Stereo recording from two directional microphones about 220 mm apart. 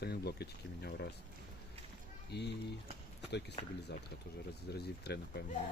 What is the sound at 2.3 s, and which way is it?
Speech, 50° left (ahead or behind).